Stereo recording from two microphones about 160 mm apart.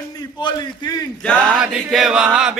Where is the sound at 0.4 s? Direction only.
25° left (ahead or behind).